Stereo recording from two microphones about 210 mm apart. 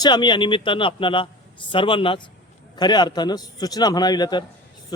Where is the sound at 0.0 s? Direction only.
20° left (ahead or behind).